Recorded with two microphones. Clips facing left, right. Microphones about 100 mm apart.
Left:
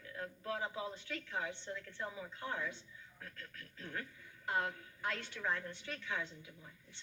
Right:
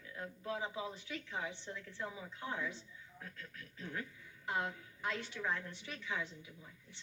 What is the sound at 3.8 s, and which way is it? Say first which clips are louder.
Speech: right 1 dB; 5° right (ahead or behind).